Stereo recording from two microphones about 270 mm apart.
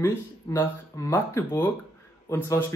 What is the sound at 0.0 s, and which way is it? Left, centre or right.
Speech, centre.